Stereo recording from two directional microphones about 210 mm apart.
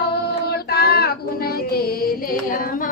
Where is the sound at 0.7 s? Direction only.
50° left (ahead or behind).